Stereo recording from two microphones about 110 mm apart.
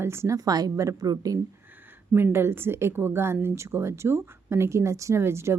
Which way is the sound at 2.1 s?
20° right (ahead or behind).